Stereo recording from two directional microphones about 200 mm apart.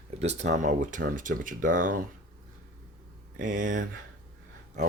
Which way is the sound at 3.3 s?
40° right (ahead or behind).